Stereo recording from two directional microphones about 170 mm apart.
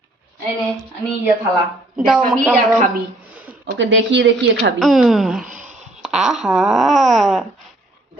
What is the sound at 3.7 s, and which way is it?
Speech, 90° right.